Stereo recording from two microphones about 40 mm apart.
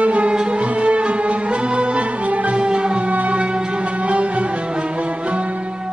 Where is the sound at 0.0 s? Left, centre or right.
Right.